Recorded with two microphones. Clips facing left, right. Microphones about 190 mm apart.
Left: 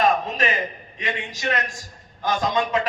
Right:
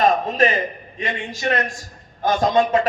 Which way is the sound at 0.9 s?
45° right (ahead or behind).